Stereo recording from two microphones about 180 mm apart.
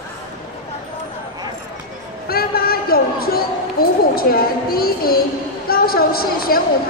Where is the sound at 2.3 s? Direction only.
55° left (ahead or behind).